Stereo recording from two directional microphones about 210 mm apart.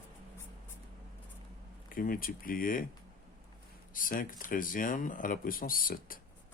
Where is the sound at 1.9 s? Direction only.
40° left (ahead or behind).